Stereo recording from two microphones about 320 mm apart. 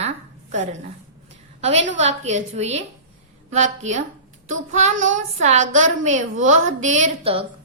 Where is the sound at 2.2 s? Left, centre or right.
Right.